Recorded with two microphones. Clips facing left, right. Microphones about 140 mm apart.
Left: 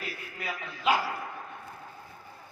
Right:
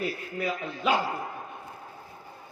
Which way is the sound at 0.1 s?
25° right (ahead or behind).